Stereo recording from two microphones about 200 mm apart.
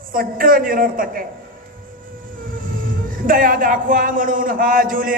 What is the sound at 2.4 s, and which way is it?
Speech, 45° right (ahead or behind).